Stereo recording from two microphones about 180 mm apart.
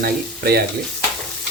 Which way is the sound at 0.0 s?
60° right (ahead or behind).